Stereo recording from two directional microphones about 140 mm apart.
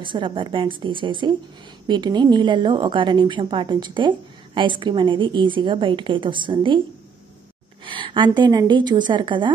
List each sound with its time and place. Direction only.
0.0 s a woman's voice: 35° right (ahead or behind)
7.8 s a woman's voice: 35° right (ahead or behind)